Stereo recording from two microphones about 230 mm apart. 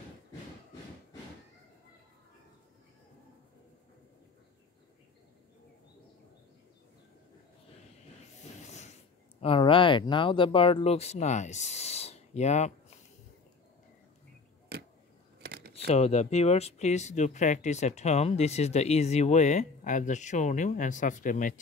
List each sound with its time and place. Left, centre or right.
9.4 s speech: left
15.4 s a sound: right
15.9 s speech: left